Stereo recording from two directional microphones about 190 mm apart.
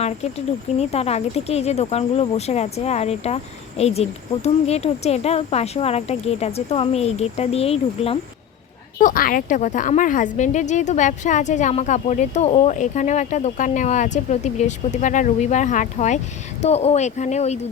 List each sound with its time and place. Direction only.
0.0 s a woman's voice: 35° left (ahead or behind)
9.0 s a woman's voice: 45° left (ahead or behind)